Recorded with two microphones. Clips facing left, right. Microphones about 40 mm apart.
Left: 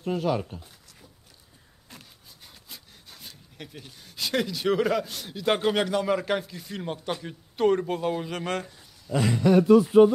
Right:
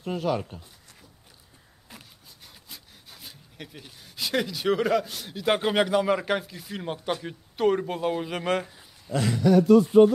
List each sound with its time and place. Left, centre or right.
0.0 s speech: centre
1.9 s speech: centre
9.1 s speech: centre
9.4 s speech: left